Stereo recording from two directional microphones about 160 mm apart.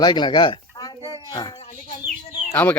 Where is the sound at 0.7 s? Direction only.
25° left (ahead or behind).